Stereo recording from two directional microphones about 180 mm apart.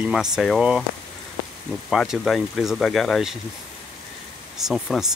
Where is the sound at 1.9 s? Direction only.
Centre (ahead or behind).